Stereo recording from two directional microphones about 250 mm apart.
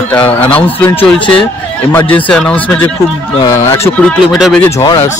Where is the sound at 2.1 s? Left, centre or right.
Centre.